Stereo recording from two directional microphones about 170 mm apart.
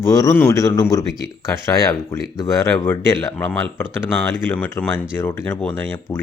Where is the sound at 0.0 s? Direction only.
15° left (ahead or behind).